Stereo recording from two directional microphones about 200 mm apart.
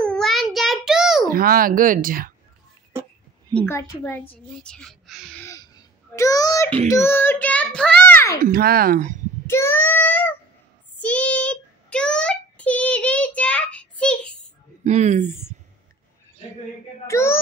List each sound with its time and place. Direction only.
0.0 s child singing: 5° left (ahead or behind)
1.3 s speech: 45° right (ahead or behind)
2.9 s a sound: 15° right (ahead or behind)
3.5 s a child's voice: 10° left (ahead or behind)
5.4 s a sound: 15° left (ahead or behind)
6.9 s a child's voice: 10° left (ahead or behind)
8.5 s speech: 50° right (ahead or behind)
9.5 s a child's voice: 10° left (ahead or behind)
11.0 s child singing: 5° left (ahead or behind)
14.8 s speech: 35° right (ahead or behind)
17.1 s a child's voice: 15° left (ahead or behind)